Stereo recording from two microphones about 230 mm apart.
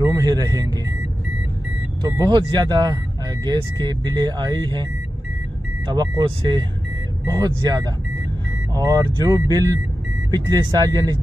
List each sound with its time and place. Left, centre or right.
0.0 s speech: centre
2.0 s speech: centre
5.9 s speech: right